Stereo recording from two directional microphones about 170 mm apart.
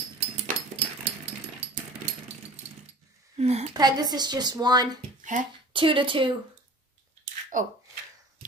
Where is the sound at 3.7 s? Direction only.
25° right (ahead or behind).